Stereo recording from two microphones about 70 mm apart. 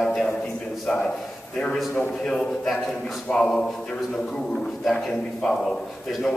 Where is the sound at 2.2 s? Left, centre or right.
Centre.